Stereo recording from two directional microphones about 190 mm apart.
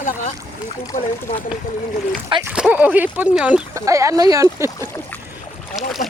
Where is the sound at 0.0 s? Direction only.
40° left (ahead or behind).